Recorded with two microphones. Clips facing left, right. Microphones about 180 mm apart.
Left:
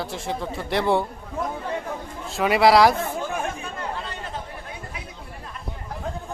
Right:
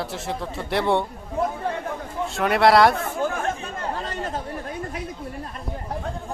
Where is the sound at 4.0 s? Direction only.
40° right (ahead or behind).